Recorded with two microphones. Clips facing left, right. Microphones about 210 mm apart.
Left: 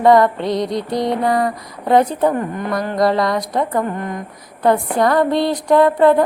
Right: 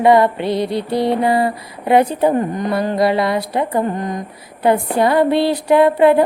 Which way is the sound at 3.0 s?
5° right (ahead or behind).